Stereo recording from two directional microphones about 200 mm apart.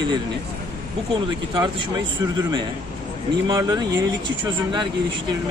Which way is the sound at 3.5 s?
20° right (ahead or behind).